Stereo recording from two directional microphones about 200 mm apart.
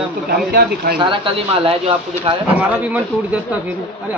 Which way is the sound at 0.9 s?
25° right (ahead or behind).